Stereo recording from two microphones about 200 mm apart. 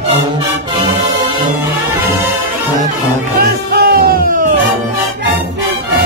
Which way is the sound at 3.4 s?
50° right (ahead or behind).